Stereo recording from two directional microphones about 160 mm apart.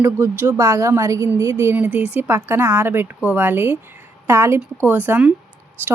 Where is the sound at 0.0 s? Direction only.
20° right (ahead or behind).